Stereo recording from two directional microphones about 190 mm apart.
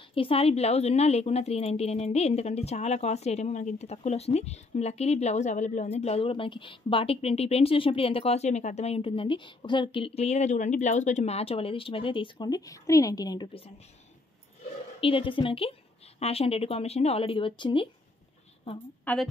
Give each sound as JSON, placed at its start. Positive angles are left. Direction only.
{"t": 0.1, "sound": "a woman's voice", "side_deg": 30}
{"t": 15.0, "sound": "a woman's voice", "side_deg": 30}
{"t": 19.1, "sound": "a woman's voice", "side_deg": 10}